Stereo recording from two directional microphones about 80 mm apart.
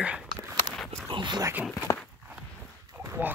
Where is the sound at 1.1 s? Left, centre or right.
Right.